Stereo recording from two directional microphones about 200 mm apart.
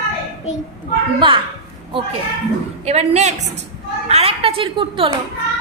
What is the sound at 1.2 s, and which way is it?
Speech, 25° right (ahead or behind).